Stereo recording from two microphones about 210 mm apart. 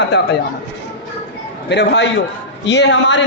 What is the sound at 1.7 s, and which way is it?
A man's voice, 55° left (ahead or behind).